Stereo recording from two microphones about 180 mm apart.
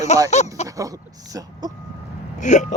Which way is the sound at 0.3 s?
40° left (ahead or behind).